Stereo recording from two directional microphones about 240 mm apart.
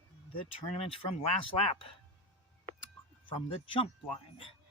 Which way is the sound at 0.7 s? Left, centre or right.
Left.